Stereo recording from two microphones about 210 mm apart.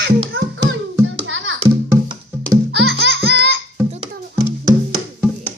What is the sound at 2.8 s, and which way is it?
Music, 50° right (ahead or behind).